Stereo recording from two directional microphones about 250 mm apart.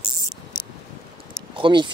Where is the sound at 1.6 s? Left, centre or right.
Centre.